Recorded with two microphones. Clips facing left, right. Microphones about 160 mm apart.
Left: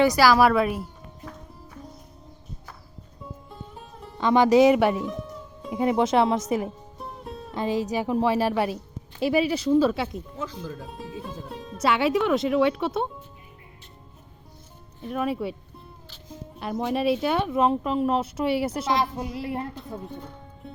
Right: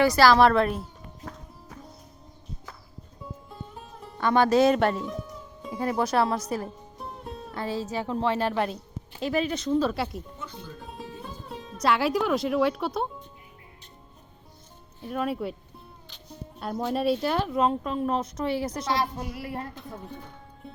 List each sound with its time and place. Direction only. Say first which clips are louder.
0.0 s a woman's voice: even; 15° left (ahead or behind)
3.5 s music: even; centre (ahead or behind)
4.2 s a woman's voice: left 3 dB; 15° left (ahead or behind)
5.0 s music: left 3 dB; centre (ahead or behind)
5.7 s speech: left 4 dB; 20° left (ahead or behind)
6.7 s music: left 2 dB; centre (ahead or behind)
7.5 s a woman's voice: left 5 dB; 15° left (ahead or behind); by 10.2 s centre (ahead or behind)
10.3 s speech: left 7 dB; 90° left
10.8 s speech: left 3 dB; centre (ahead or behind)
15.0 s speech: left 2 dB; centre (ahead or behind)
16.6 s speech: left 2 dB; centre (ahead or behind)
18.9 s speech: left 3 dB; 20° left (ahead or behind)
20.6 s speech: left 2 dB; centre (ahead or behind)